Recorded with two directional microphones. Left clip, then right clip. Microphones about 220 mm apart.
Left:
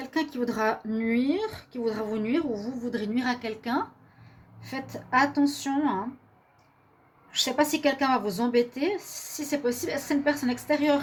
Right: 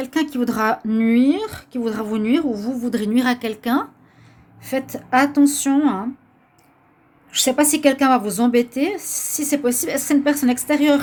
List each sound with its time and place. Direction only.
0.0 s speech: 50° right (ahead or behind)
7.3 s speech: 50° right (ahead or behind)